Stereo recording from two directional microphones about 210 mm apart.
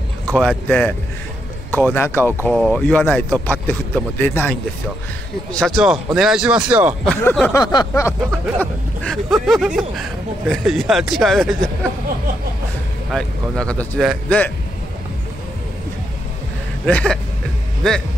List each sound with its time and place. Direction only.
0.3 s speech: 5° left (ahead or behind)
7.1 s speech: 5° left (ahead or behind)
7.6 s a sound: 20° left (ahead or behind)
9.0 s speech: centre (ahead or behind)
13.1 s speech: 5° left (ahead or behind)
16.8 s speech: 5° left (ahead or behind)